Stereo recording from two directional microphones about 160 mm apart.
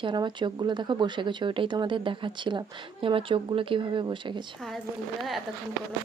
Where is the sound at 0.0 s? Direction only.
30° right (ahead or behind).